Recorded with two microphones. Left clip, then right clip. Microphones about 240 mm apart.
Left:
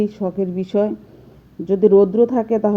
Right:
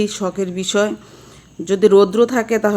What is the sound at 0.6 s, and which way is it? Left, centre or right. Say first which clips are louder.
Speech: right 3 dB; right.